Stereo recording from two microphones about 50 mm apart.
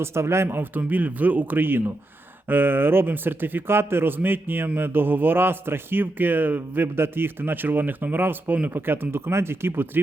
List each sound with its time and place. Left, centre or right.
0.0 s speech: right
0.4 s a man's voice: right